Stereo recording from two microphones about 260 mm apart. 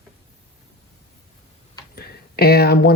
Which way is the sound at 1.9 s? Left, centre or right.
Left.